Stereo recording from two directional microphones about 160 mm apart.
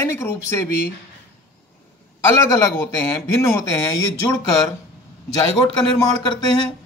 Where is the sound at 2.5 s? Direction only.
20° left (ahead or behind).